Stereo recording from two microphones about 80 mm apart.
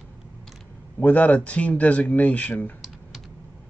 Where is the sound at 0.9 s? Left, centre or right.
Centre.